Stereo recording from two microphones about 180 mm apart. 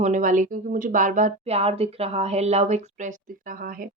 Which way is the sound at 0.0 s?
45° right (ahead or behind).